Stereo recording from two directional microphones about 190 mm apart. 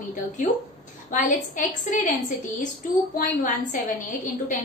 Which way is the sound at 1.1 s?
40° left (ahead or behind).